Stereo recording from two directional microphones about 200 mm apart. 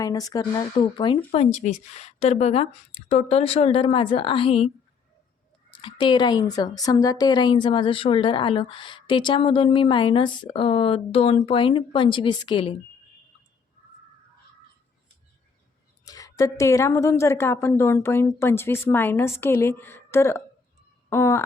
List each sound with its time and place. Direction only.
0.0 s a woman's voice: 20° left (ahead or behind)
5.7 s a woman's voice: 25° left (ahead or behind)
16.0 s a woman's voice: 15° left (ahead or behind)